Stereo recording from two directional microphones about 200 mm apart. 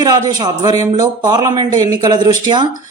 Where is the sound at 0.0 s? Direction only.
20° right (ahead or behind).